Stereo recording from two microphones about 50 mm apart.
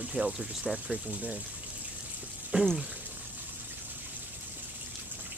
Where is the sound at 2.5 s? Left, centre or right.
Right.